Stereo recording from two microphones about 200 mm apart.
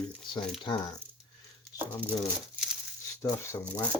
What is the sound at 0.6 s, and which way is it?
Speech, 25° left (ahead or behind).